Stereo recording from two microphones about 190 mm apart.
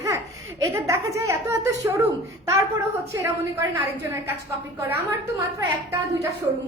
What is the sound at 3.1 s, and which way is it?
Speech, 15° right (ahead or behind).